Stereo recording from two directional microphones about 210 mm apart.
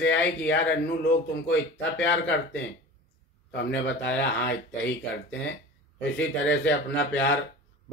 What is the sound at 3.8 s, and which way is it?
Speech, 60° left (ahead or behind).